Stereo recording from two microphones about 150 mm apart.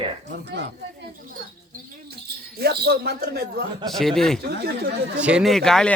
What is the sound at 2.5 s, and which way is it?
Speech, 90° right.